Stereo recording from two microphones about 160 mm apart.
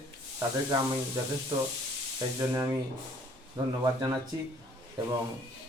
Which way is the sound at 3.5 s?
25° right (ahead or behind).